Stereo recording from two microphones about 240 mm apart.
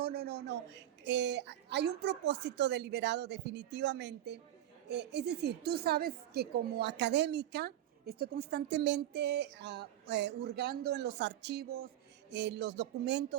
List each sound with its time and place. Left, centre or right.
0.0 s a man's voice: right